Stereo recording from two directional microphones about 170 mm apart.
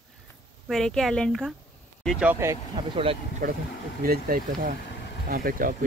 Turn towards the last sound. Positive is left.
turn(degrees=-55)  # may be behind; listen again after turning